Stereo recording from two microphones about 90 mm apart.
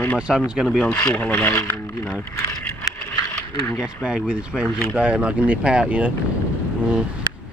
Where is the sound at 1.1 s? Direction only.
20° left (ahead or behind).